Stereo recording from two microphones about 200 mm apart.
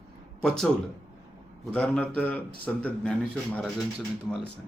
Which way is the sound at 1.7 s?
5° left (ahead or behind).